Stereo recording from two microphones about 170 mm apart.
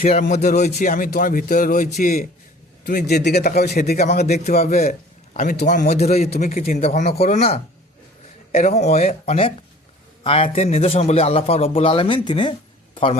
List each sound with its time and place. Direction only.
0.0 s speech: 40° left (ahead or behind)
2.8 s a man's voice: 65° left (ahead or behind)
4.4 s a man's voice: 40° left (ahead or behind)
4.9 s a sound: 50° left (ahead or behind)
5.6 s a man's voice: 45° left (ahead or behind)
6.4 s speech: 55° left (ahead or behind)
6.8 s a man's voice: 40° left (ahead or behind)